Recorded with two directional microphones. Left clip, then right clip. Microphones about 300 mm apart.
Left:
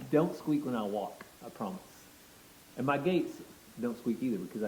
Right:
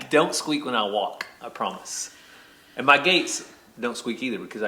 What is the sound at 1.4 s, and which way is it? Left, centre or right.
A man's voice, centre.